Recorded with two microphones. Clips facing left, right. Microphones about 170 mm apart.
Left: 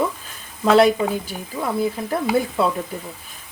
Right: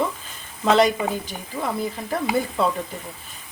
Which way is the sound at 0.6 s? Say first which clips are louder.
Left 3 dB; 5° left (ahead or behind).